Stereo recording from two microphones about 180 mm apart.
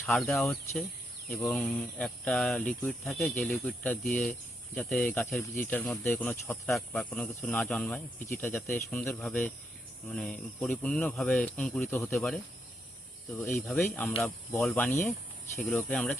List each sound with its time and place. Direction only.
0.0 s speech: centre (ahead or behind)
12.0 s speech: centre (ahead or behind)
13.7 s speech: 10° left (ahead or behind)
14.8 s speech: 10° left (ahead or behind)